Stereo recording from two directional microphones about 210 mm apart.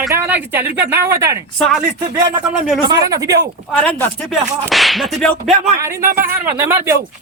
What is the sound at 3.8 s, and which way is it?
Whip, 5° left (ahead or behind).